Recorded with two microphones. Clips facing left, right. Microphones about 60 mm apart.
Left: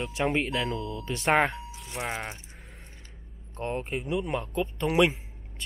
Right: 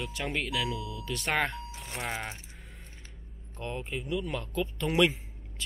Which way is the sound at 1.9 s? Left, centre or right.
Centre.